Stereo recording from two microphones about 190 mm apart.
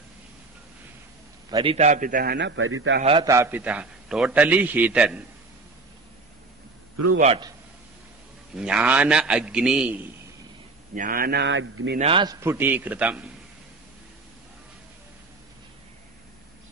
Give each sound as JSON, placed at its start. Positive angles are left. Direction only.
{"t": 1.5, "sound": "a man's voice", "side_deg": -30}
{"t": 3.0, "sound": "a man's voice", "side_deg": -30}
{"t": 3.3, "sound": "a man's voice", "side_deg": -10}
{"t": 8.5, "sound": "a man's voice", "side_deg": -5}
{"t": 11.0, "sound": "a man's voice", "side_deg": -50}
{"t": 12.0, "sound": "a man's voice", "side_deg": -25}